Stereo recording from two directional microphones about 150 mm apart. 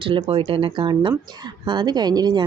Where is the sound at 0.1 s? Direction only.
35° right (ahead or behind).